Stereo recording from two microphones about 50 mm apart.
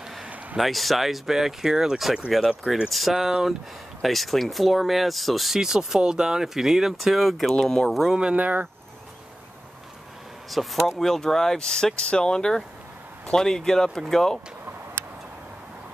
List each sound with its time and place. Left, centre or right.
0.6 s speech: centre
5.6 s speech: centre
7.5 s speech: centre
7.9 s speech: centre
8.2 s speech: right
10.5 s speech: centre